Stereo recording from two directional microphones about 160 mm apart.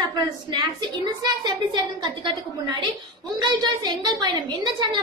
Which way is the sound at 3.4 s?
25° right (ahead or behind).